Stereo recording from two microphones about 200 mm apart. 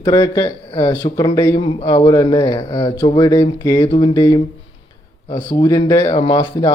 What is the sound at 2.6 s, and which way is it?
Speech, 30° left (ahead or behind).